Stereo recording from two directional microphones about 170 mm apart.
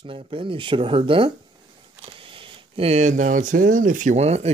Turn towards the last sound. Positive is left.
turn(degrees=-40)  # may be behind; listen again after turning